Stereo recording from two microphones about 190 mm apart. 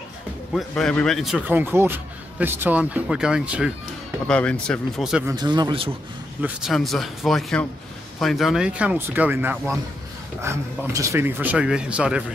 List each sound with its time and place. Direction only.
0.6 s a man's voice: 5° left (ahead or behind)
5.2 s speech: 20° right (ahead or behind)
6.4 s a man's voice: centre (ahead or behind)